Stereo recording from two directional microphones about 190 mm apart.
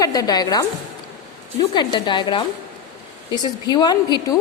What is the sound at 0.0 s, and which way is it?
Speech, 20° left (ahead or behind).